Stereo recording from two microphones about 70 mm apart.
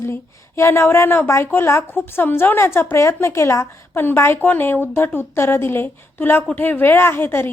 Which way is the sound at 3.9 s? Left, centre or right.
Left.